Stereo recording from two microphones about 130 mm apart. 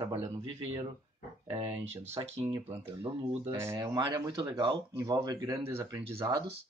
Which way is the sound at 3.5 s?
20° right (ahead or behind).